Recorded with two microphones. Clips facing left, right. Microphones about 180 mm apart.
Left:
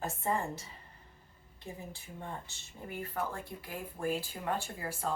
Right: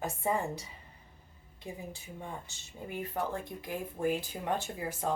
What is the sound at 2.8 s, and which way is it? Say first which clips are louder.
Speech: right 2 dB; 20° right (ahead or behind).